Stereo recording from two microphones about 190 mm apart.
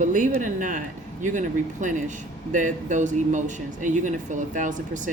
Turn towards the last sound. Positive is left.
turn(degrees=-40)  # may be behind; listen again after turning